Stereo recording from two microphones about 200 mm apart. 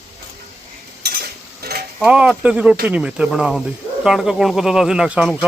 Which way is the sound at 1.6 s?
50° right (ahead or behind).